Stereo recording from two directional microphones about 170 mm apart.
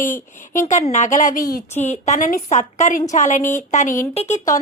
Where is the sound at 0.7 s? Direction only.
45° left (ahead or behind).